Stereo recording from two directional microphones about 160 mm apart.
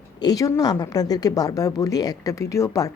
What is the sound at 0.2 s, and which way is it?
Speech, 25° left (ahead or behind).